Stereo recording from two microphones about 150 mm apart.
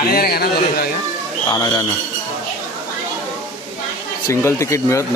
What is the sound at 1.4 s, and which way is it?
Speech, 25° left (ahead or behind).